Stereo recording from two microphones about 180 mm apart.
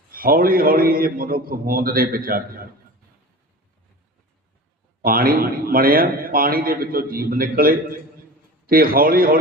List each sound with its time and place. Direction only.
0.1 s a man's voice: 55° right (ahead or behind)
5.0 s a man's voice: 55° right (ahead or behind)